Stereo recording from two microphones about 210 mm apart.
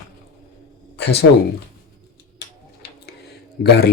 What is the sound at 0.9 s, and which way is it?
Speech, 50° left (ahead or behind).